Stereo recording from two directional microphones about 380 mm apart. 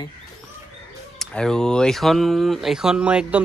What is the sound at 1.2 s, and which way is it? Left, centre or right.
Speech, centre.